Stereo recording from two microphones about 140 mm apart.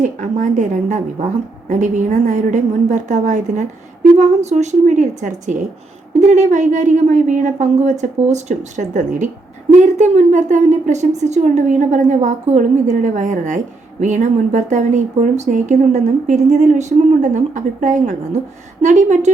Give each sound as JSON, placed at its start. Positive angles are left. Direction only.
{"t": 0.0, "sound": "a woman's voice", "side_deg": -65}